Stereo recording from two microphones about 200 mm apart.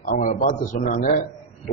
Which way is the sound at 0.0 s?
45° left (ahead or behind).